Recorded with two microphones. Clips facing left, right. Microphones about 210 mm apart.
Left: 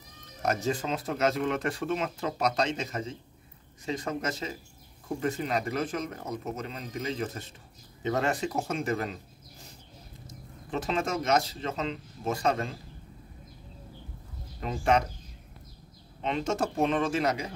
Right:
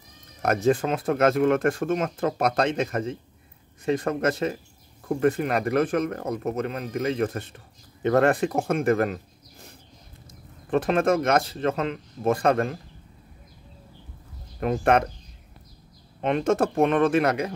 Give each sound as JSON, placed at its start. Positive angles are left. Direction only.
{"t": 0.4, "sound": "speech", "side_deg": -60}
{"t": 10.7, "sound": "speech", "side_deg": -55}
{"t": 14.6, "sound": "speech", "side_deg": -60}
{"t": 16.2, "sound": "speech", "side_deg": -55}